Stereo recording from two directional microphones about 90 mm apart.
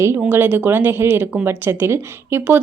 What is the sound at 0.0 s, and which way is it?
A woman's voice, 25° right (ahead or behind).